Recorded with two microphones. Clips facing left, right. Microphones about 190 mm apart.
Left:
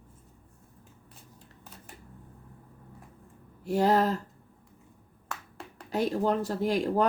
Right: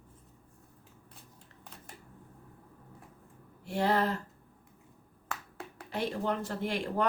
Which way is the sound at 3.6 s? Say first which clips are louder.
Left 5 dB; 40° left (ahead or behind).